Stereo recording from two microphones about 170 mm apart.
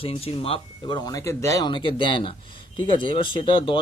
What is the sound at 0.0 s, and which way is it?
Speech, 35° left (ahead or behind).